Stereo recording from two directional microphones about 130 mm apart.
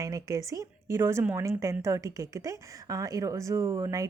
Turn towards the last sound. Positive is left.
turn(degrees=-25)  # may be behind; listen again after turning